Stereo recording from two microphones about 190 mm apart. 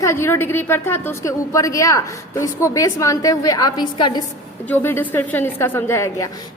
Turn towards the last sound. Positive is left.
turn(degrees=15)  # may be behind; listen again after turning